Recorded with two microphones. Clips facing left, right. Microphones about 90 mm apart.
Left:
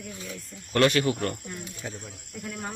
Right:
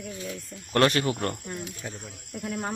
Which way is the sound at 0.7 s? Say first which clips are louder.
Even; 35° right (ahead or behind).